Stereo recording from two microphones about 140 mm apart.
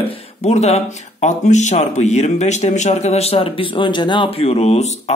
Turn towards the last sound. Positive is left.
turn(degrees=50)  # may be behind; listen again after turning